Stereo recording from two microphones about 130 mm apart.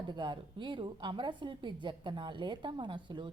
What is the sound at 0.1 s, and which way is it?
A woman's voice, 35° right (ahead or behind).